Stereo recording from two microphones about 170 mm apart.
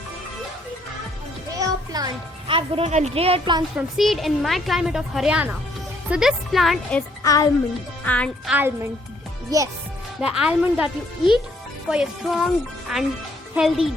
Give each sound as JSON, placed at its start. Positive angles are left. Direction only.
{"t": 1.5, "sound": "music", "side_deg": -20}
{"t": 2.5, "sound": "a woman's voice", "side_deg": -35}
{"t": 3.8, "sound": "speech", "side_deg": 0}
{"t": 7.2, "sound": "speech", "side_deg": 20}
{"t": 8.0, "sound": "speech", "side_deg": 10}
{"t": 8.4, "sound": "speech", "side_deg": -10}
{"t": 10.2, "sound": "speech", "side_deg": -5}
{"t": 11.9, "sound": "speech", "side_deg": -5}